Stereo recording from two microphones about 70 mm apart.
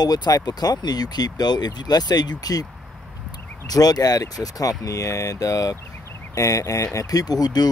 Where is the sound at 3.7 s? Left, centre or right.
Left.